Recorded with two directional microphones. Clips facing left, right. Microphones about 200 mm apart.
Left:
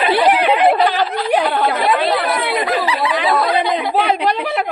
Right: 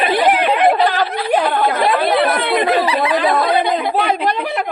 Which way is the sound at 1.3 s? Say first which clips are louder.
Right 1 dB; 5° left (ahead or behind).